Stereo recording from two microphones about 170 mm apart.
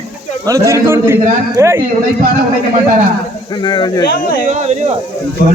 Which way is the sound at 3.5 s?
25° left (ahead or behind).